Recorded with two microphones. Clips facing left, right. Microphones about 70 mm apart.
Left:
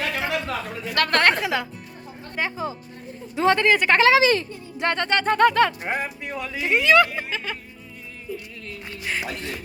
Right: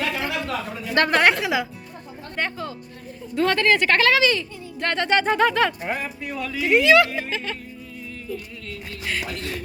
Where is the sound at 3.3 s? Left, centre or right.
Centre.